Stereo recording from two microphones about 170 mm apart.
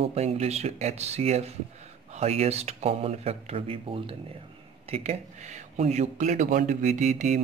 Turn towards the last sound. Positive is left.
turn(degrees=-50)  # may be behind; listen again after turning